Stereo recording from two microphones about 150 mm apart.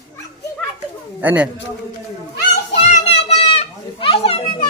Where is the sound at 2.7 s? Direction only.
45° left (ahead or behind).